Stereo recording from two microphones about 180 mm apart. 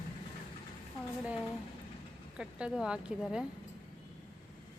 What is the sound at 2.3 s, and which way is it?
Speech, 5° right (ahead or behind).